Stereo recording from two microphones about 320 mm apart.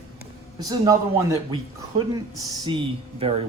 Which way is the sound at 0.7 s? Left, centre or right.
Centre.